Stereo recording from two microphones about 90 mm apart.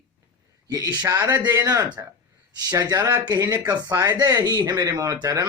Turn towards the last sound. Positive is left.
turn(degrees=-40)  # may be behind; listen again after turning